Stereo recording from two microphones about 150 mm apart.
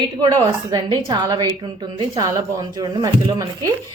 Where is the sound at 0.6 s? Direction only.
25° right (ahead or behind).